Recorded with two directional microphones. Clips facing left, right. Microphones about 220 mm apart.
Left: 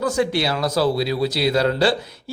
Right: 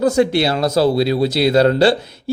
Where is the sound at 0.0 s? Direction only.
25° right (ahead or behind).